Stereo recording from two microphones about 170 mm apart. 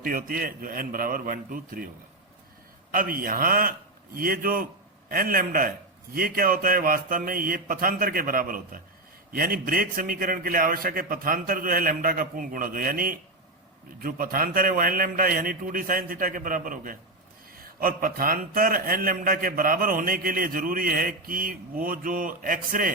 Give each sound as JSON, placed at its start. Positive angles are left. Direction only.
{"t": 0.0, "sound": "a man's voice", "side_deg": -55}
{"t": 2.9, "sound": "a man's voice", "side_deg": -55}